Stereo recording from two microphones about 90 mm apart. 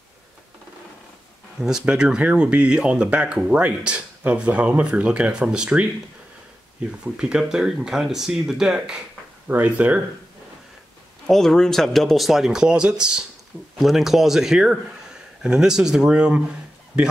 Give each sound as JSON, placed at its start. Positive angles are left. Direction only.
{"t": 1.6, "sound": "speech", "side_deg": -5}
{"t": 7.2, "sound": "speech", "side_deg": -10}
{"t": 9.5, "sound": "speech", "side_deg": -15}
{"t": 11.2, "sound": "speech", "side_deg": 5}